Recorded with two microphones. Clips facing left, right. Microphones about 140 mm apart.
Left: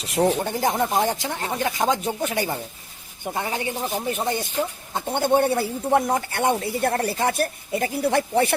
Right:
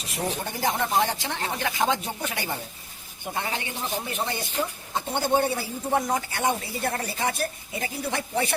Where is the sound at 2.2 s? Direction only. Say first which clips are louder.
Left 7 dB; 40° left (ahead or behind).